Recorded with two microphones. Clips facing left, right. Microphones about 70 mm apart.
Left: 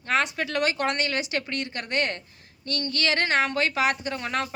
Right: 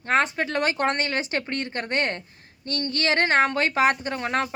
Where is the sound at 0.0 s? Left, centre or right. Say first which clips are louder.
Right 3 dB; right.